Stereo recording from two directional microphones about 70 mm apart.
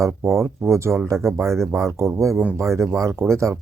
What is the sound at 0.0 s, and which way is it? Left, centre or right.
Speech, right.